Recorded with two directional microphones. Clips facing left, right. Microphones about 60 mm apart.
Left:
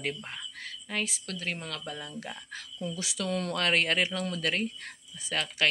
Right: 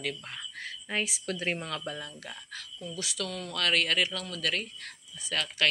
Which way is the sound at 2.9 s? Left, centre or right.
Left.